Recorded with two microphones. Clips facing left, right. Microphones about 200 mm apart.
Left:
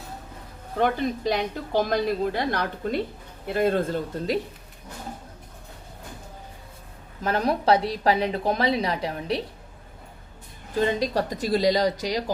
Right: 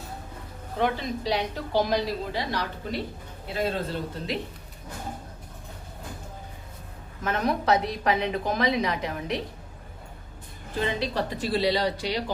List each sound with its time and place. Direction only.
0.8 s a woman's voice: 50° left (ahead or behind)
7.3 s a woman's voice: 30° left (ahead or behind)
10.8 s a woman's voice: 40° left (ahead or behind)